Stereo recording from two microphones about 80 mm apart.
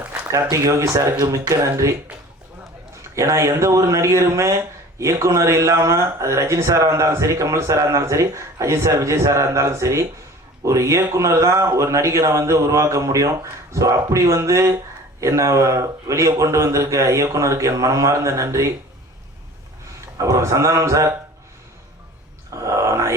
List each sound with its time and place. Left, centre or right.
0.5 s speech: right
3.2 s speech: right
20.1 s speech: right
22.5 s a sound: right